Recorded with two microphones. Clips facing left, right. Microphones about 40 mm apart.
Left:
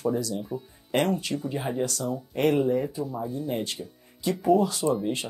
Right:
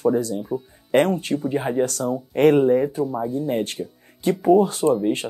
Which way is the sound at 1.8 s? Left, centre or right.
Right.